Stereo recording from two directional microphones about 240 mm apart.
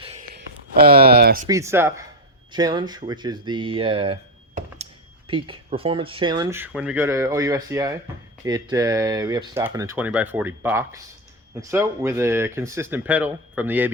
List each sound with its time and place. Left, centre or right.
0.0 s a sound: right
0.9 s speech: right
1.5 s speech: centre